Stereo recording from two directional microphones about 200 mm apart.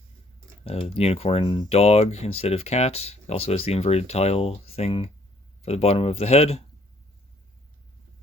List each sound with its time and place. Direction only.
0.6 s speech: 30° left (ahead or behind)